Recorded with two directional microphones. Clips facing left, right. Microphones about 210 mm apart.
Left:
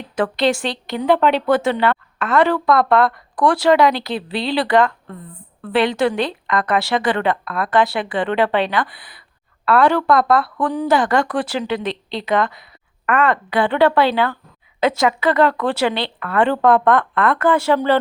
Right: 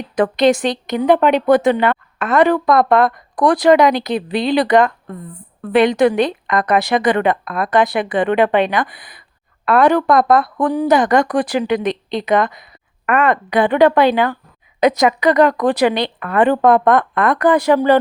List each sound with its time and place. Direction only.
0.2 s a woman's voice: 20° right (ahead or behind)